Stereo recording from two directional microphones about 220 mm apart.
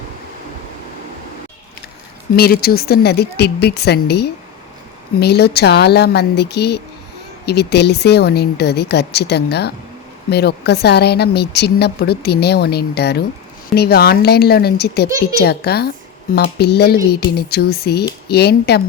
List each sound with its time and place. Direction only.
2.3 s speech: 45° left (ahead or behind)